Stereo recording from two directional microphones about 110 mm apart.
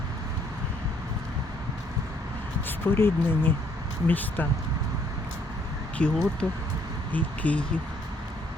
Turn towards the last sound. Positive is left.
turn(degrees=15)  # may be behind; listen again after turning